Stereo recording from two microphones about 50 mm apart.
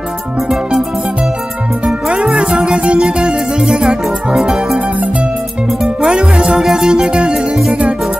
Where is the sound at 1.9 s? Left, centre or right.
Centre.